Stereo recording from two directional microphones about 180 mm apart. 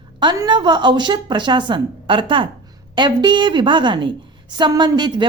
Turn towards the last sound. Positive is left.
turn(degrees=-25)  # may be behind; listen again after turning